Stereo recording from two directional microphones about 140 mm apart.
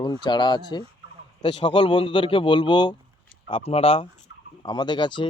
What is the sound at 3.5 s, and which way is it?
A man's voice, 45° left (ahead or behind).